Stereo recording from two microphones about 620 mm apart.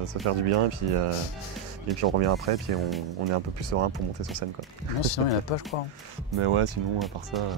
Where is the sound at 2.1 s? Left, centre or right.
Right.